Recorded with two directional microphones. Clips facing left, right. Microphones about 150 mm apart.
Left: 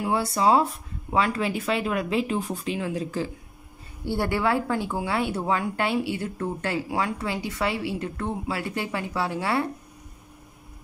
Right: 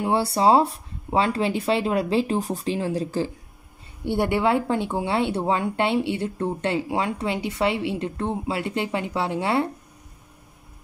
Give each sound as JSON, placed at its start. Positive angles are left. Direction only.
{"t": 0.0, "sound": "speech", "side_deg": -30}
{"t": 4.0, "sound": "speech", "side_deg": -20}